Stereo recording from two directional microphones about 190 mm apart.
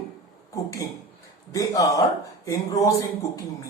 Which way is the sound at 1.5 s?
15° left (ahead or behind).